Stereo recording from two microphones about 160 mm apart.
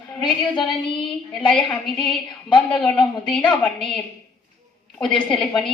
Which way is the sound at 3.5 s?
5° left (ahead or behind).